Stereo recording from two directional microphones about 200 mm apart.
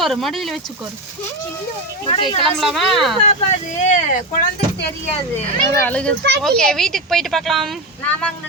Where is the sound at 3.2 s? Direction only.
35° left (ahead or behind).